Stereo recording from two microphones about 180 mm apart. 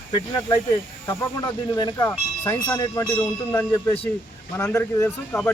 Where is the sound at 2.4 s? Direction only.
10° left (ahead or behind).